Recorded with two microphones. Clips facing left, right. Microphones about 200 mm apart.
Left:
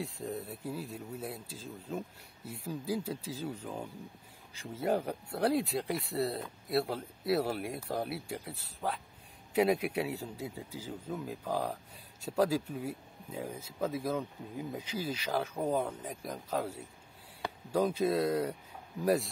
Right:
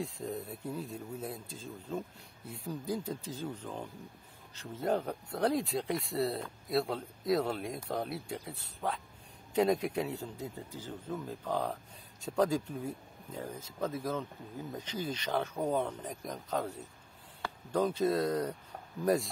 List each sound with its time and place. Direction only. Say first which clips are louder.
0.0 s a man's voice: even; 5° left (ahead or behind)